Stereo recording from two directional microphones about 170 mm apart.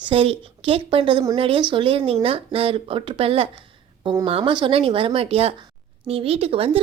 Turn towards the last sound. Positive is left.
turn(degrees=-35)  # may be behind; listen again after turning